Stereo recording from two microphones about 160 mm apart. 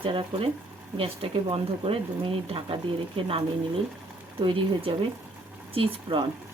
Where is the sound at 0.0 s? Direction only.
35° right (ahead or behind).